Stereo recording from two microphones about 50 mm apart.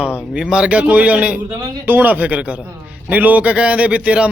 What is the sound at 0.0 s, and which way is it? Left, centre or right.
A man's voice, centre.